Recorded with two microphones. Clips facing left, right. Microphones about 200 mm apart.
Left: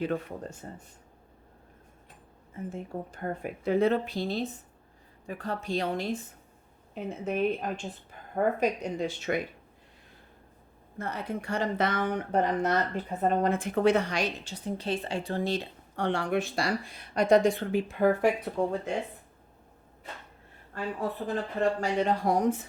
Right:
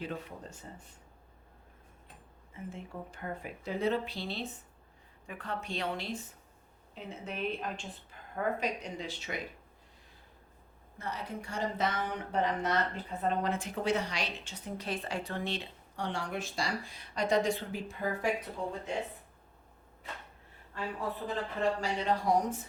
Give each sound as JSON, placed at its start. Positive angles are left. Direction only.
{"t": 0.0, "sound": "speech", "side_deg": 55}
{"t": 2.5, "sound": "a woman's voice", "side_deg": 40}
{"t": 10.9, "sound": "a woman's voice", "side_deg": 55}
{"t": 16.0, "sound": "speech", "side_deg": 60}
{"t": 21.8, "sound": "a woman's voice", "side_deg": 50}